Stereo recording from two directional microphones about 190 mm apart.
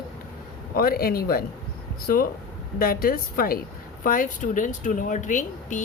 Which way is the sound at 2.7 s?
50° left (ahead or behind).